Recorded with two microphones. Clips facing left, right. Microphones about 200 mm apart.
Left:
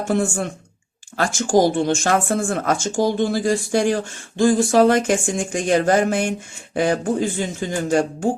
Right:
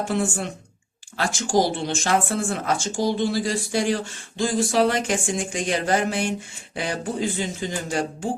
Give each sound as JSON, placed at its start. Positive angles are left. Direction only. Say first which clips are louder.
{"t": 0.1, "sound": "speech", "louder": "left 4 dB", "side_deg": 45}